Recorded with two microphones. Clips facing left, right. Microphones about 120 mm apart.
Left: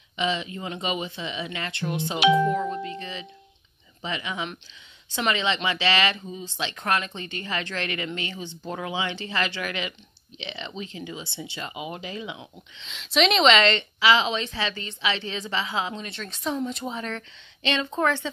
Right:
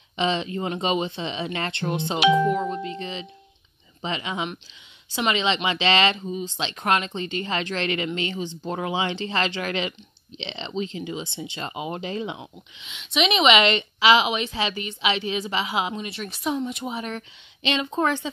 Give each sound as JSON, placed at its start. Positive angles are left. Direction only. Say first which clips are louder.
{"t": 0.1, "sound": "speech", "louder": "right 3 dB", "side_deg": -30}
{"t": 11.7, "sound": "speech", "louder": "right 7 dB", "side_deg": -35}
{"t": 12.7, "sound": "a woman's voice", "louder": "left 2 dB", "side_deg": -5}